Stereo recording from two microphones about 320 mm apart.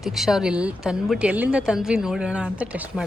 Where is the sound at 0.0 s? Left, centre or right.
Centre.